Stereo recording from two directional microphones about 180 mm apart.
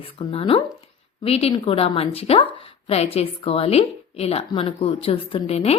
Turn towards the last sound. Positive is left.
turn(degrees=35)  # may be behind; listen again after turning